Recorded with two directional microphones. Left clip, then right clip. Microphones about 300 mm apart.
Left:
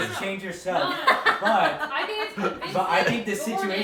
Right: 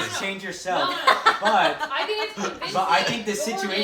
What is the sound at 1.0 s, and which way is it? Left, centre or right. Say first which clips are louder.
Speech: right 2 dB; right.